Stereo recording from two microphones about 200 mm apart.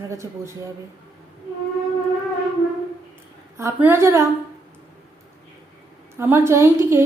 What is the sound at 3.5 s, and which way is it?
Speech, 15° right (ahead or behind).